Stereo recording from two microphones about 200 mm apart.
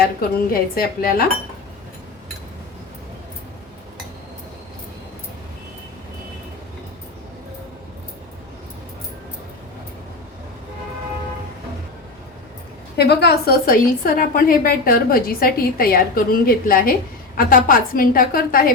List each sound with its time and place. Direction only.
0.0 s a woman's voice: 45° left (ahead or behind)
13.0 s a woman's voice: 55° left (ahead or behind)